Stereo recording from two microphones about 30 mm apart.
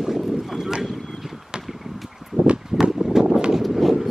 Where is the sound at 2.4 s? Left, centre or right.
Right.